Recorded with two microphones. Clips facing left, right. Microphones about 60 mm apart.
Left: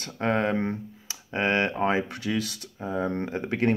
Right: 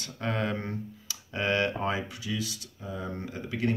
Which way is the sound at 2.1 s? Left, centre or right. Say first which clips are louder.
Left 5 dB; left.